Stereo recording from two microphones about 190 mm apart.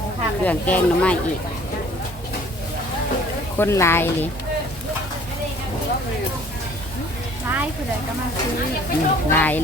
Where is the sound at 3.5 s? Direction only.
15° left (ahead or behind).